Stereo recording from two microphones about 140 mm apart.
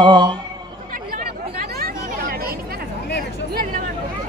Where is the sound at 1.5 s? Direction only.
90° right.